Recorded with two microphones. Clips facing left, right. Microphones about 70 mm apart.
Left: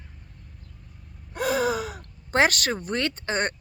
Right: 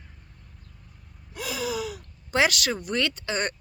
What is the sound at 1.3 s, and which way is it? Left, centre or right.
Speech, left.